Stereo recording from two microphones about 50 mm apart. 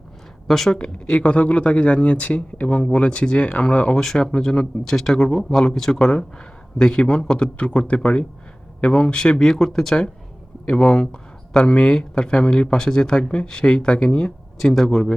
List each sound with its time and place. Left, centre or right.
0.4 s speech: centre
0.8 s speech: left
3.9 s speech: centre
14.6 s speech: centre